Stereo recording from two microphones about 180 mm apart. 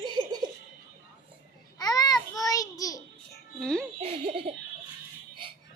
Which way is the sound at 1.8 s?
20° left (ahead or behind).